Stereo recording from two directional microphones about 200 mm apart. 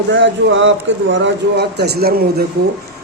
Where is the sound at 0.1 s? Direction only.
70° right (ahead or behind).